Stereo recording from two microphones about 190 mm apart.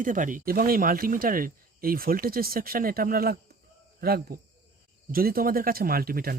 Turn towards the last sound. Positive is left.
turn(degrees=-50)  # may be behind; listen again after turning